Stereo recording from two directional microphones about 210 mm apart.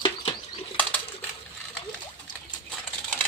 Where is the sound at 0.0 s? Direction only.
25° left (ahead or behind).